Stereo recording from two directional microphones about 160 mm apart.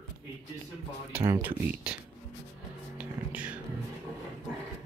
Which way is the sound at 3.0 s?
10° right (ahead or behind).